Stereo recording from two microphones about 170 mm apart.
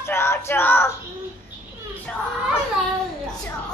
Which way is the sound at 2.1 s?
5° left (ahead or behind).